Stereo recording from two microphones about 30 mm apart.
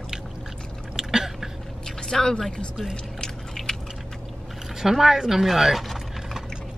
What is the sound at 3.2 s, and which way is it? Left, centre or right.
Biting, left.